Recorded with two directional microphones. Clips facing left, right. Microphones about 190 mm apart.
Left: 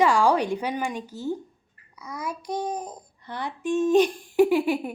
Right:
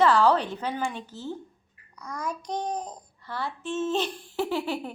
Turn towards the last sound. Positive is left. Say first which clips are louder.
# left 8 dB
turn(degrees=15)  # may be behind; listen again after turning